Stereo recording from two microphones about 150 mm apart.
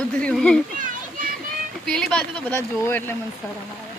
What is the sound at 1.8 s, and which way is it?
Speech, 5° left (ahead or behind).